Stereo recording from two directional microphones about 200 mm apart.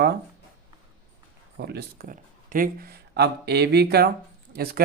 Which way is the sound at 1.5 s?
55° right (ahead or behind).